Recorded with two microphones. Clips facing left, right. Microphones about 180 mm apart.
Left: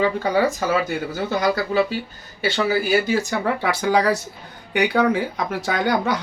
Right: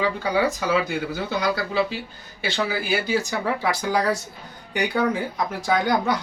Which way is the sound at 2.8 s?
55° left (ahead or behind).